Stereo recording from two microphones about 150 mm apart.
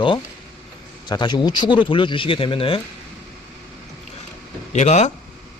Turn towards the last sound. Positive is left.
turn(degrees=50)  # may be behind; listen again after turning